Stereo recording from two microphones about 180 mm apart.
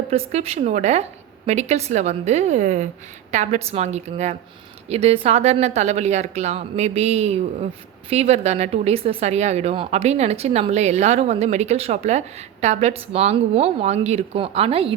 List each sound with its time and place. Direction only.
0.1 s a woman's voice: 35° right (ahead or behind)